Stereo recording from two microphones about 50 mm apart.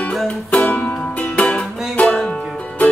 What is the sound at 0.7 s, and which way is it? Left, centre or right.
Music, left.